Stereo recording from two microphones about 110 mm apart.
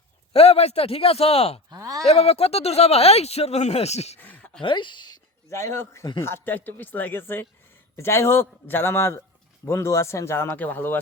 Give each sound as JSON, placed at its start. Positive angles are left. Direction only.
{"t": 0.3, "sound": "a man's voice", "side_deg": 70}
{"t": 1.7, "sound": "speech", "side_deg": -30}
{"t": 2.0, "sound": "speech", "side_deg": 75}
{"t": 4.2, "sound": "a sound", "side_deg": 15}
{"t": 4.6, "sound": "speech", "side_deg": 45}
{"t": 5.5, "sound": "speech", "side_deg": 25}